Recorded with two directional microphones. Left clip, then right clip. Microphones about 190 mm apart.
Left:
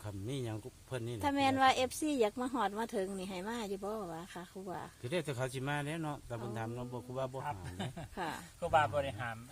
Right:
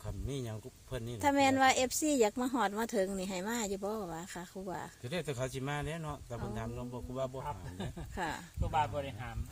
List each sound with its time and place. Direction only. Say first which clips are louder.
0.3 s a man's voice: even; 25° left (ahead or behind)
1.2 s speech: right 2 dB; 15° right (ahead or behind)
5.0 s a man's voice: left 1 dB; 25° left (ahead or behind)
8.1 s speech: right 3 dB; 15° right (ahead or behind)
8.7 s speech: left 3 dB; 15° left (ahead or behind)